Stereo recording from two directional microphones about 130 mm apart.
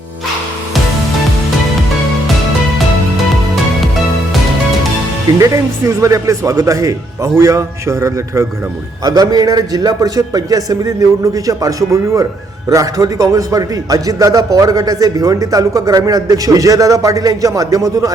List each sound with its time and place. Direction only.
5.4 s a man's voice: 25° right (ahead or behind)